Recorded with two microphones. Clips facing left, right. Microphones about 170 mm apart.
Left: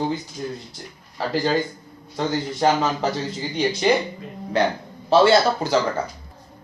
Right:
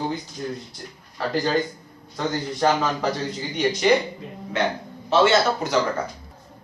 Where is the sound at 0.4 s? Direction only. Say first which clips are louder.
Even; 15° left (ahead or behind).